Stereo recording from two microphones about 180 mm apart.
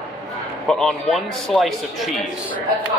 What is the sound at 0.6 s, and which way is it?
Speech, centre (ahead or behind).